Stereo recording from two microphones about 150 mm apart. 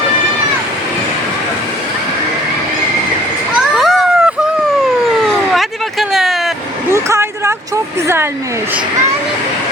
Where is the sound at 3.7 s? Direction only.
Centre (ahead or behind).